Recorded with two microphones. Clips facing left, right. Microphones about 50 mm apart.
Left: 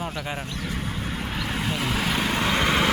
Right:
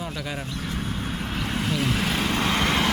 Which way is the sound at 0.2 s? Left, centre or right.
Left.